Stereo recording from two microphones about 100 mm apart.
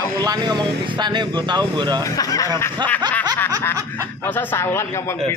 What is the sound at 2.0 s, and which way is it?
Speech, 35° left (ahead or behind).